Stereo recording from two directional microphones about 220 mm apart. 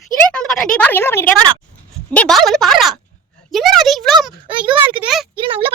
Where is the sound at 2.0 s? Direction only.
5° left (ahead or behind).